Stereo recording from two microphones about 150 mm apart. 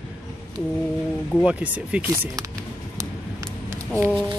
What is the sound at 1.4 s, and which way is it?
Speech, 5° right (ahead or behind).